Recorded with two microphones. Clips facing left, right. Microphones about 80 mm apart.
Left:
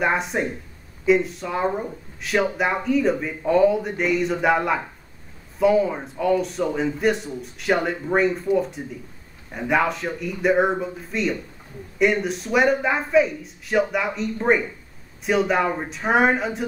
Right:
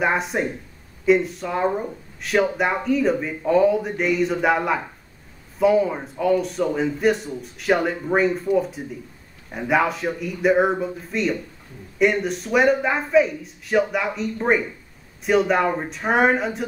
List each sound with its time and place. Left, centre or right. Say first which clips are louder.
0.0 s speech: right 1 dB; centre